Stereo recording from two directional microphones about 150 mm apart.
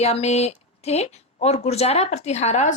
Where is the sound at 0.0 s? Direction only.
45° left (ahead or behind).